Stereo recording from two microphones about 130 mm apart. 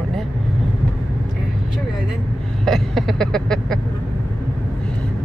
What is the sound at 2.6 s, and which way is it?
Vehicle, centre (ahead or behind).